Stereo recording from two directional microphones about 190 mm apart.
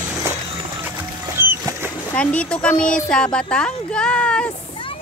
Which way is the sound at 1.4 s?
10° right (ahead or behind).